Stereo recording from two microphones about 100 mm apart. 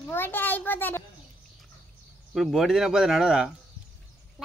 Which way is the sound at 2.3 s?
Centre (ahead or behind).